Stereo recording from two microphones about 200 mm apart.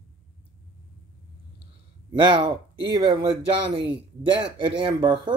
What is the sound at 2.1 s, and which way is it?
Speech, 25° right (ahead or behind).